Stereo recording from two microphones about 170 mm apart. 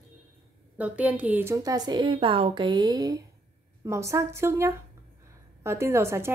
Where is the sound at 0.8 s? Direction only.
10° right (ahead or behind).